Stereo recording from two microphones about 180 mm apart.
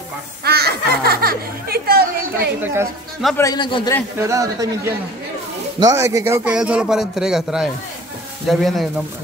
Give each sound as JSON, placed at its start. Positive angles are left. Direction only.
{"t": 0.4, "sound": "a sound", "side_deg": -60}
{"t": 2.6, "sound": "speech", "side_deg": -15}
{"t": 3.3, "sound": "a man's voice", "side_deg": 20}
{"t": 4.2, "sound": "speech", "side_deg": -15}
{"t": 5.8, "sound": "a man's voice", "side_deg": -15}